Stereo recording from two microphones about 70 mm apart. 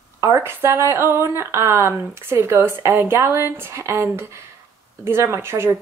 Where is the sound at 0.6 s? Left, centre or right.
Right.